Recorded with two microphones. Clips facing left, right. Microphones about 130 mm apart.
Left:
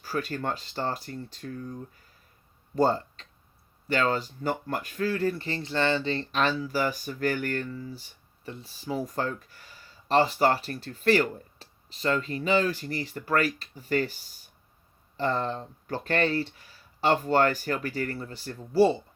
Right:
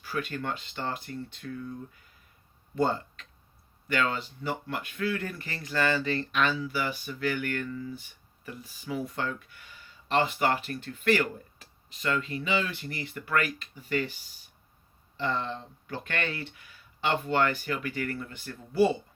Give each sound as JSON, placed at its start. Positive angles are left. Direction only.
{"t": 0.0, "sound": "speech", "side_deg": 40}